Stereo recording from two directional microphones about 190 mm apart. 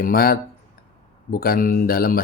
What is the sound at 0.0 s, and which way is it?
Speech, 50° left (ahead or behind).